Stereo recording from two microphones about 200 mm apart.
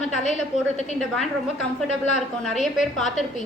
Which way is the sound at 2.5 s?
Centre (ahead or behind).